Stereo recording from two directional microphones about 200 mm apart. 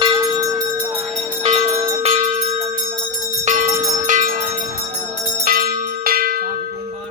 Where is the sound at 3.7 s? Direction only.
15° right (ahead or behind).